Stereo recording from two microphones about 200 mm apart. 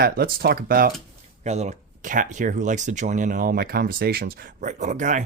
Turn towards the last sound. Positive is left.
turn(degrees=-40)  # may be behind; listen again after turning